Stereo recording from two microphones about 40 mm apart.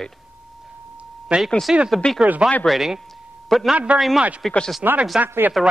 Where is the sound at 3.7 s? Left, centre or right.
Right.